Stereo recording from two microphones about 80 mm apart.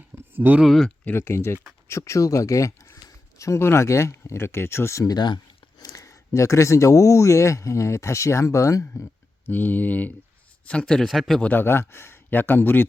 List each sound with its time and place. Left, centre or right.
0.3 s speech: right
0.6 s speech: centre
1.1 s speech: left
5.0 s speech: left
5.8 s speech: left
9.5 s speech: left
10.7 s speech: centre
11.3 s speech: centre
11.6 s speech: left